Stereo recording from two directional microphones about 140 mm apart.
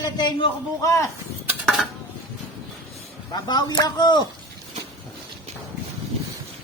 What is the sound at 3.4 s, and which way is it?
Speech, 30° left (ahead or behind).